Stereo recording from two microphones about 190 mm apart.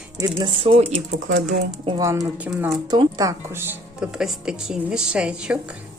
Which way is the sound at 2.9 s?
20° right (ahead or behind).